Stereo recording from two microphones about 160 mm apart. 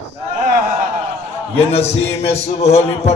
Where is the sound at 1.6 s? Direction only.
40° left (ahead or behind).